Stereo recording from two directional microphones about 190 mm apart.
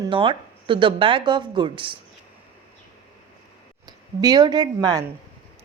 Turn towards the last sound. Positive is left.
turn(degrees=-20)  # may be behind; listen again after turning